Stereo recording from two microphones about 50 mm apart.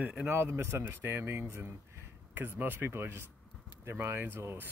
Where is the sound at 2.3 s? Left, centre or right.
Right.